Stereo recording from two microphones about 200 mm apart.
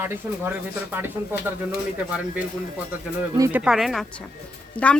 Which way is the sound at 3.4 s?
5° right (ahead or behind).